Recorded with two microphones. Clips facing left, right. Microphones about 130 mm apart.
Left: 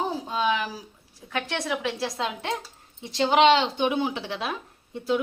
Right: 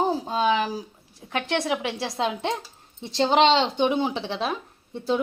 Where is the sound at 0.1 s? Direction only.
30° right (ahead or behind).